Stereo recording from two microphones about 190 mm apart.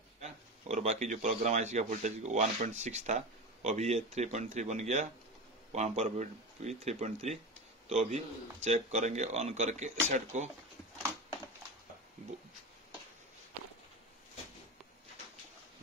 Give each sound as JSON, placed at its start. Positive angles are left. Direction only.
{"t": 0.2, "sound": "speech", "side_deg": -35}